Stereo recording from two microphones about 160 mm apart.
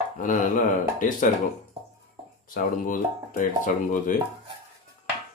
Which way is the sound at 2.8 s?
55° left (ahead or behind).